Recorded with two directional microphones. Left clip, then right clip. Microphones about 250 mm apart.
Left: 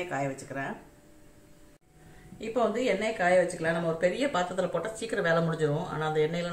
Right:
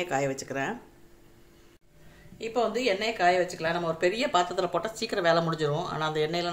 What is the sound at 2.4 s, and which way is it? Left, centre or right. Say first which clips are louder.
Speech: right 1 dB; right.